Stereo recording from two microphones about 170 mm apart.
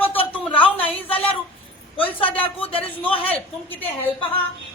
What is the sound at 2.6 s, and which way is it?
Speech, 35° left (ahead or behind).